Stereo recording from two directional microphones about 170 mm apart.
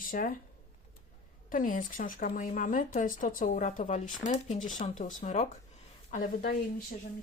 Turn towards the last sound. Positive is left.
turn(degrees=55)  # may be behind; listen again after turning